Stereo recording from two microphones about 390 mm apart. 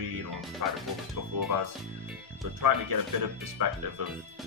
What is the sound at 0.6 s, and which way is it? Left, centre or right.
Speech, right.